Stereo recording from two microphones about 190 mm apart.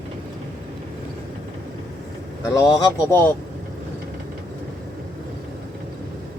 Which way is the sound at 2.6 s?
20° left (ahead or behind).